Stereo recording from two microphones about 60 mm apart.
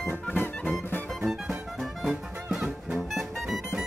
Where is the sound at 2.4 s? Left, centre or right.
Centre.